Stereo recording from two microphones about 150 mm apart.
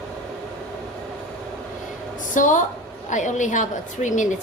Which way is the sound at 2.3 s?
55° left (ahead or behind).